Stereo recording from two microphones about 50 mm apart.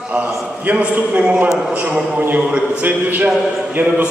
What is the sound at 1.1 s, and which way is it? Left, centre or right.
Speech, right.